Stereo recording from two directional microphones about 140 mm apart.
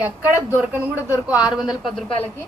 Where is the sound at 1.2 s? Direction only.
5° right (ahead or behind).